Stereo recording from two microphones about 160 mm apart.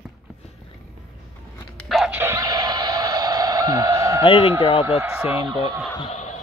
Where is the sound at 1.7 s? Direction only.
Centre (ahead or behind).